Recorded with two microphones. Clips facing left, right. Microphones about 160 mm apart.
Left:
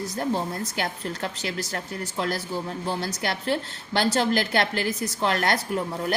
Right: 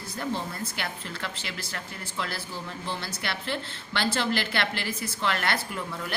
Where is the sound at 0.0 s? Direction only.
40° left (ahead or behind).